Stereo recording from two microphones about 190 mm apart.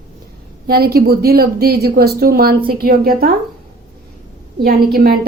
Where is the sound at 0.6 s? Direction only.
55° right (ahead or behind).